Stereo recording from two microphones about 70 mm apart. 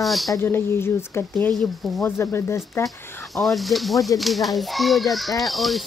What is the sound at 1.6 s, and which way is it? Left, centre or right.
Speech, centre.